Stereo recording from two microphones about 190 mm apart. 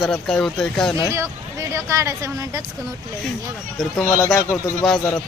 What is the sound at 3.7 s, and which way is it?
Speech, centre (ahead or behind).